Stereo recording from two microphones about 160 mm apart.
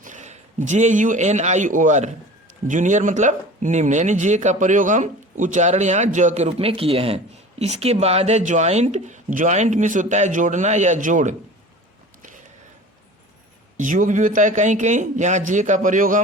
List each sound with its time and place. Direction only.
0.0 s speech: 50° right (ahead or behind)
13.7 s speech: 55° right (ahead or behind)